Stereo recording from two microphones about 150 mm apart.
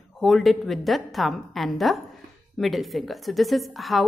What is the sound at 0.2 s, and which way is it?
A woman's voice, centre (ahead or behind).